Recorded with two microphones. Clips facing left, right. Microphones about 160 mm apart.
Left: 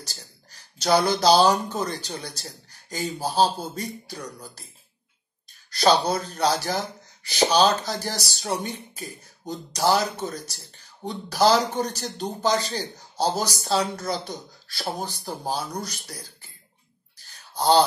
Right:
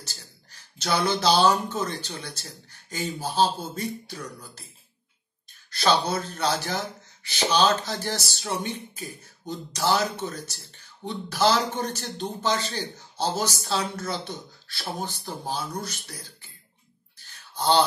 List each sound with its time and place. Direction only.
0.0 s speech: 40° left (ahead or behind)
5.7 s a man's voice: 40° left (ahead or behind)
17.2 s a sound: 40° left (ahead or behind)